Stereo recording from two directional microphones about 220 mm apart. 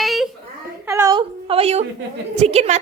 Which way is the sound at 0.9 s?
15° right (ahead or behind).